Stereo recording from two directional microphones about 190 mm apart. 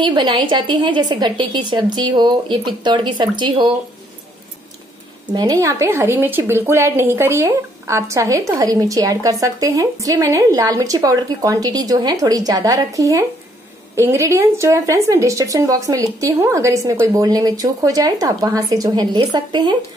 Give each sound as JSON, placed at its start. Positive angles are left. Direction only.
{"t": 0.0, "sound": "a woman's voice", "side_deg": -25}
{"t": 5.3, "sound": "a woman's voice", "side_deg": -20}